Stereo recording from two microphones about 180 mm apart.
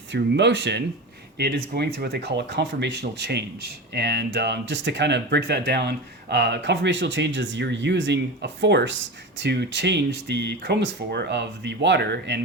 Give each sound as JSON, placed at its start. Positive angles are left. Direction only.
{"t": 0.1, "sound": "speech", "side_deg": -75}
{"t": 1.4, "sound": "speech", "side_deg": -60}